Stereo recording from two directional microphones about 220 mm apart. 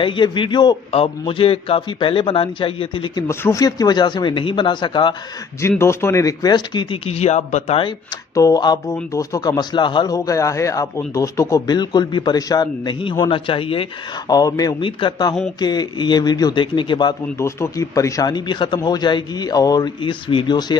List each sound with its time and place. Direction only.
0.0 s speech: 20° left (ahead or behind)
8.4 s a man's voice: 15° left (ahead or behind)